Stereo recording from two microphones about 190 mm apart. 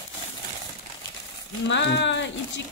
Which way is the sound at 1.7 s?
70° left (ahead or behind).